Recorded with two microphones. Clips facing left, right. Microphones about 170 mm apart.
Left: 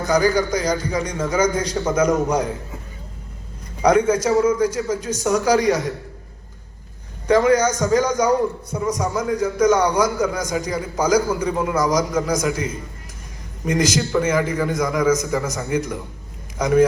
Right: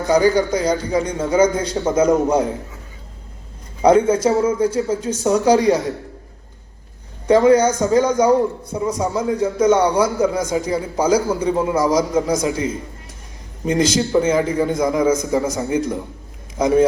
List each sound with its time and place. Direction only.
0.1 s a man's voice: 25° right (ahead or behind)
3.8 s a man's voice: 30° right (ahead or behind)
7.3 s a man's voice: 30° right (ahead or behind)